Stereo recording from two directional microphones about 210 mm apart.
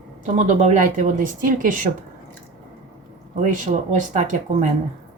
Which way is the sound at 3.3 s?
35° right (ahead or behind).